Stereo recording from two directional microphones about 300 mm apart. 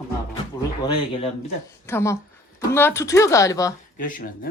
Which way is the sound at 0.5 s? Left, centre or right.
Centre.